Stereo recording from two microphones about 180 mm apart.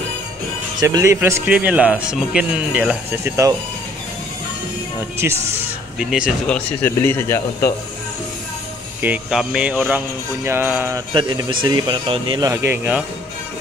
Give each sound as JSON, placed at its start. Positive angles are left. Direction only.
{"t": 0.7, "sound": "speech", "side_deg": -20}
{"t": 5.2, "sound": "speech", "side_deg": -10}
{"t": 6.4, "sound": "speech", "side_deg": 10}
{"t": 9.0, "sound": "speech", "side_deg": -5}
{"t": 11.1, "sound": "speech", "side_deg": -25}